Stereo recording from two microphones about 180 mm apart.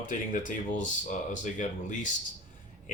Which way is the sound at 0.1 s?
45° left (ahead or behind).